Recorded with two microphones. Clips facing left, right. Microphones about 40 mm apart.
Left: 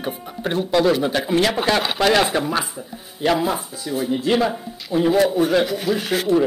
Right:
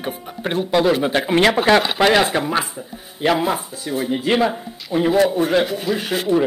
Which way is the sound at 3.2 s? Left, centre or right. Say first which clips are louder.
Right 1 dB; right.